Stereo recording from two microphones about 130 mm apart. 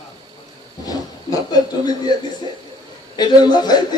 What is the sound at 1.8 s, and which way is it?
Speech, 30° left (ahead or behind).